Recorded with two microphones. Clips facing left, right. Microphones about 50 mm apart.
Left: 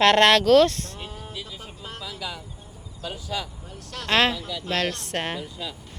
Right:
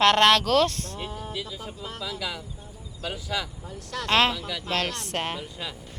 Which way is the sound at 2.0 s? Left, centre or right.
Right.